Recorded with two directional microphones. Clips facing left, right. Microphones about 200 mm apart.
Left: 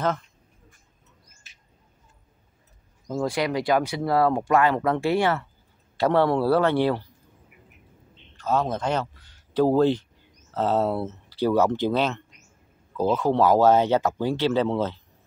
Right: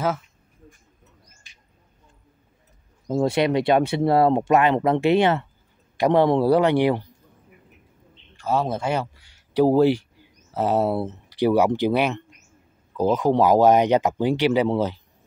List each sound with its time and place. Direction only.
0.0 s speech: 5° right (ahead or behind)
1.5 s bird: 5° left (ahead or behind)
3.1 s speech: 25° right (ahead or behind)
8.4 s speech: 10° right (ahead or behind)